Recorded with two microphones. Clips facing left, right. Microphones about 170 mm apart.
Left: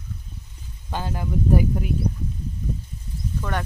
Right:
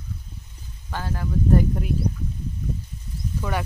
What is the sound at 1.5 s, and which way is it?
Speech, centre (ahead or behind).